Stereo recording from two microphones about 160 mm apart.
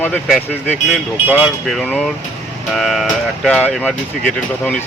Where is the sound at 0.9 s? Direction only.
10° right (ahead or behind); by 4.8 s 5° left (ahead or behind).